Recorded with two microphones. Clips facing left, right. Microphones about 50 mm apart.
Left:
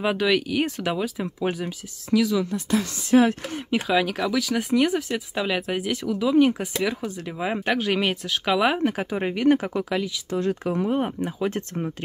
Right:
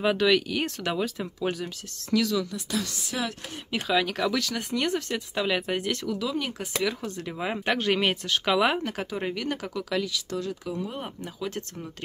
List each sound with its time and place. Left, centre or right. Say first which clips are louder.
0.0 s speech: even; centre
2.5 s speech: left 6 dB; left
3.8 s speech: left 1 dB; centre
6.1 s speech: left 11 dB; centre
9.1 s speech: left 11 dB; left
10.4 s speech: left 8 dB; left
10.9 s speech: left 11 dB; left